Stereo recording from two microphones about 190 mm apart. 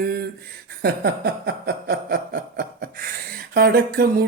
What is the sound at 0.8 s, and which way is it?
Snicker, 55° right (ahead or behind).